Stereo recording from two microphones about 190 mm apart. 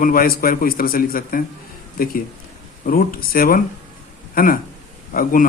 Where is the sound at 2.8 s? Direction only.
50° left (ahead or behind).